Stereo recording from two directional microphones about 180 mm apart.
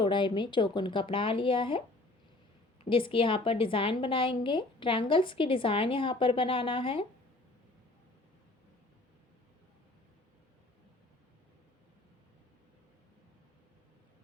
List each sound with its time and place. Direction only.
0.0 s a woman's voice: 25° left (ahead or behind)
2.9 s a woman's voice: 30° left (ahead or behind)